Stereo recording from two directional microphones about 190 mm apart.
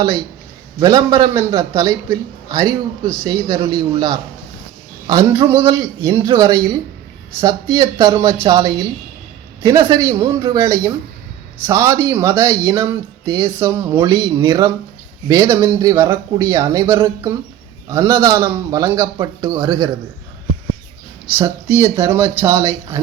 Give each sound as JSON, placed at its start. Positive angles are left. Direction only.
{"t": 0.8, "sound": "a man's voice", "side_deg": -20}
{"t": 21.3, "sound": "speech", "side_deg": -15}